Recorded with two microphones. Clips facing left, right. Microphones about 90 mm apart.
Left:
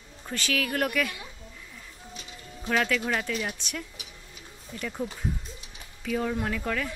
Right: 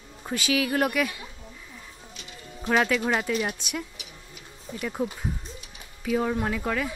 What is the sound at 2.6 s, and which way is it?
Speech, 20° right (ahead or behind).